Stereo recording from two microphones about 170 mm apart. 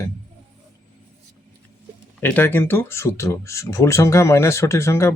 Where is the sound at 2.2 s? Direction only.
10° left (ahead or behind).